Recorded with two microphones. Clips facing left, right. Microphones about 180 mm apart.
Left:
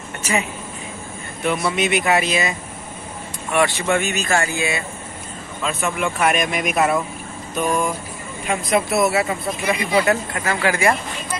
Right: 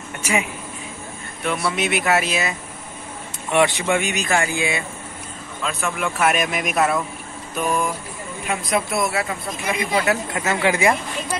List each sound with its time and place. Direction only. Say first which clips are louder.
0.2 s speech: even; 10° right (ahead or behind)
1.8 s speech: left 1 dB; centre (ahead or behind)
3.5 s speech: even; 15° right (ahead or behind)
5.6 s speech: left 2 dB; centre (ahead or behind)
10.3 s speech: right 1 dB; 20° right (ahead or behind)